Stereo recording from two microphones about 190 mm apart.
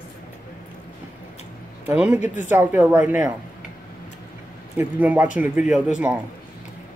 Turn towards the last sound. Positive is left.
turn(degrees=-5)  # may be behind; listen again after turning